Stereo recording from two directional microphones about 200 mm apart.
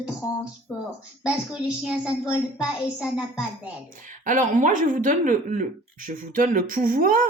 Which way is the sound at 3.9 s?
40° right (ahead or behind).